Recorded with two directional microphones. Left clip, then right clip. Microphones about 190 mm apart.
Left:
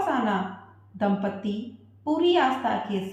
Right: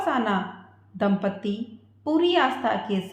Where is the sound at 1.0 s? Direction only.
50° right (ahead or behind).